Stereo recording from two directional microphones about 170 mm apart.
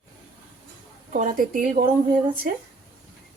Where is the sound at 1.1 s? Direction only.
50° right (ahead or behind).